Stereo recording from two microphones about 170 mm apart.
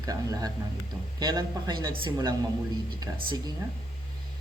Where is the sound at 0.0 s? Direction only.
20° right (ahead or behind).